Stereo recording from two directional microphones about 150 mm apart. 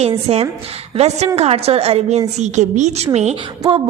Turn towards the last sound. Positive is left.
turn(degrees=-50)  # may be behind; listen again after turning